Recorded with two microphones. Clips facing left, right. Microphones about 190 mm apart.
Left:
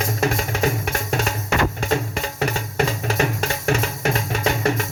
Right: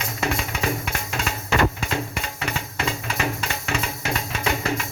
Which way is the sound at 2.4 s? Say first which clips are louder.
Left 6 dB; 40° left (ahead or behind).